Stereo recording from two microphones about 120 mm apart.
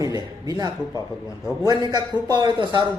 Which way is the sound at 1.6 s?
35° right (ahead or behind).